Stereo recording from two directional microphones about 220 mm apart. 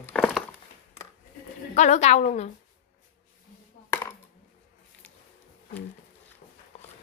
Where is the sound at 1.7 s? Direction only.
30° left (ahead or behind).